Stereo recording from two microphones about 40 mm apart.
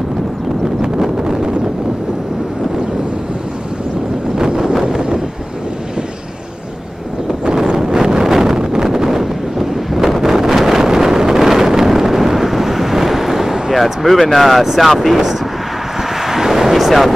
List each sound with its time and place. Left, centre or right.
1.2 s a sound: centre
4.8 s vehicle: centre
7.4 s wind noise: centre
10.9 s vehicle: centre
13.7 s speech: centre
16.2 s vehicle: centre